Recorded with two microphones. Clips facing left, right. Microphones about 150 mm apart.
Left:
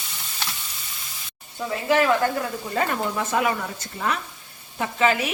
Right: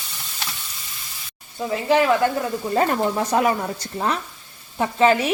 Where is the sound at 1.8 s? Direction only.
20° right (ahead or behind).